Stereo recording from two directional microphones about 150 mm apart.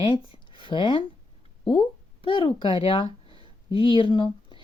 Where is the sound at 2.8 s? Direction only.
35° left (ahead or behind).